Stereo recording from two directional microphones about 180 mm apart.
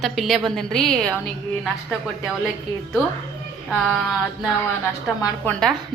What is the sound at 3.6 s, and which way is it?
A woman's voice, centre (ahead or behind).